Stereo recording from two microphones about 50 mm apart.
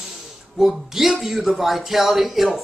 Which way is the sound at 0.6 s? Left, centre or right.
Centre.